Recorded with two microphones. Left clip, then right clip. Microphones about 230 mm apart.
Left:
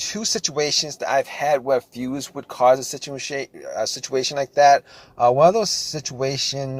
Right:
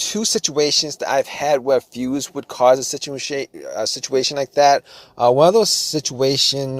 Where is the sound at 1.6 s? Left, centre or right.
Right.